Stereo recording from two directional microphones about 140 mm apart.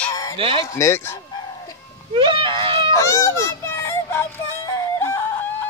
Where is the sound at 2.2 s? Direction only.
35° right (ahead or behind).